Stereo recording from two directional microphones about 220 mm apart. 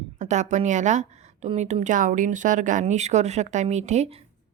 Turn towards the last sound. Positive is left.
turn(degrees=-30)  # may be behind; listen again after turning